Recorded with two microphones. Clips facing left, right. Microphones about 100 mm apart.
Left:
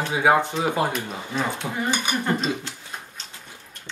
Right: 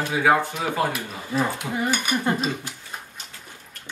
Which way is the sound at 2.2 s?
10° right (ahead or behind).